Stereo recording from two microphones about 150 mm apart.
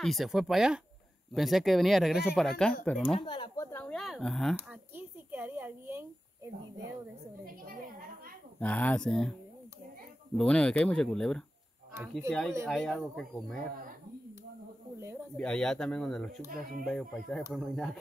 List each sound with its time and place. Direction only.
0.0 s speech: centre (ahead or behind)
3.2 s speech: 35° left (ahead or behind)
3.7 s speech: 5° left (ahead or behind)
4.6 s a sound: 10° right (ahead or behind)
8.5 s speech: 10° left (ahead or behind)
10.3 s speech: 5° left (ahead or behind)
15.3 s speech: 5° left (ahead or behind)